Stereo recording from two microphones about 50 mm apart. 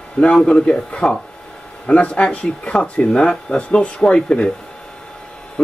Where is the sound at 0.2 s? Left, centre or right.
Centre.